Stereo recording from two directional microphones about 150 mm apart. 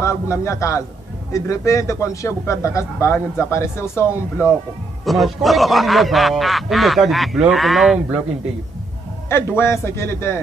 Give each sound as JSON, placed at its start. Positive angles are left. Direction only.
{"t": 0.0, "sound": "a man's voice", "side_deg": 20}
{"t": 4.1, "sound": "speech", "side_deg": -5}
{"t": 9.6, "sound": "a man's voice", "side_deg": 15}